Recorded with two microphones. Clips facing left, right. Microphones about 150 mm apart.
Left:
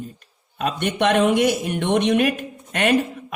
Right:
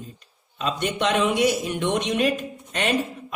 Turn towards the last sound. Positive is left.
turn(degrees=55)  # may be behind; listen again after turning